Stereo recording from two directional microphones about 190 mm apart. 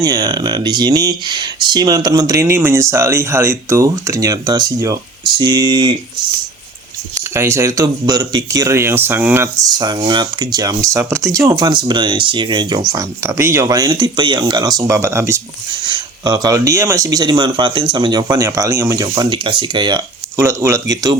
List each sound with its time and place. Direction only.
0.0 s speech: 20° right (ahead or behind)
7.3 s speech: 15° right (ahead or behind)